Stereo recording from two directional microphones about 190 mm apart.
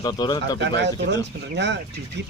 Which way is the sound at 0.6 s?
65° right (ahead or behind).